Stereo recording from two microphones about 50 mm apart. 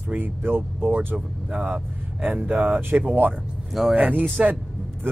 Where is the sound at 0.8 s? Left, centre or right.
Right.